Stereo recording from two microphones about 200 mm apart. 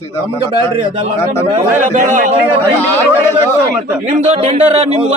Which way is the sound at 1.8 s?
40° right (ahead or behind).